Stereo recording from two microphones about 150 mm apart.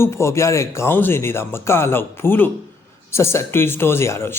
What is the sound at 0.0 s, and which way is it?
Speech, 20° left (ahead or behind).